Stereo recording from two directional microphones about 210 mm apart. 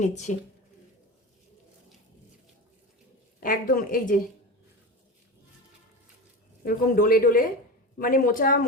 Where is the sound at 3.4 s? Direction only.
40° left (ahead or behind).